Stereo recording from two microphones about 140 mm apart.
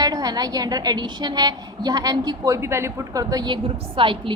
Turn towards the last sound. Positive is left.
turn(degrees=-35)  # may be behind; listen again after turning